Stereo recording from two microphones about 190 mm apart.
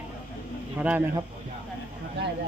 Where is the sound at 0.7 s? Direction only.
10° right (ahead or behind).